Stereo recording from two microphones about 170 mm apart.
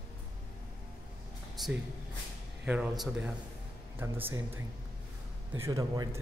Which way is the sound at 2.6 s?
5° right (ahead or behind).